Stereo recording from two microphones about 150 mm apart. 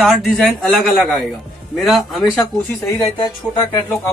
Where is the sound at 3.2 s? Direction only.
30° left (ahead or behind).